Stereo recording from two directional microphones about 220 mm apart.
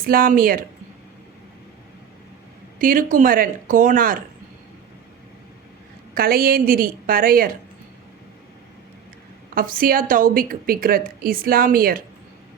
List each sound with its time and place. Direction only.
0.0 s a woman's voice: 40° right (ahead or behind)
2.7 s a woman's voice: 40° right (ahead or behind)
6.1 s a woman's voice: 40° right (ahead or behind)
9.6 s a woman's voice: 40° right (ahead or behind)